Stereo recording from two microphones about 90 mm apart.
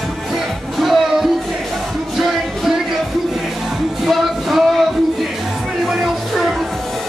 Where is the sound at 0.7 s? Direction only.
Centre (ahead or behind).